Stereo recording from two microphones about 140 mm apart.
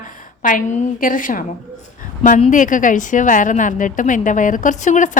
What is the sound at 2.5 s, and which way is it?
A woman's voice, 65° left (ahead or behind).